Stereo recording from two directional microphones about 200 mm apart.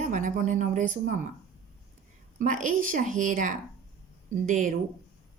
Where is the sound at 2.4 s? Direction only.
40° right (ahead or behind).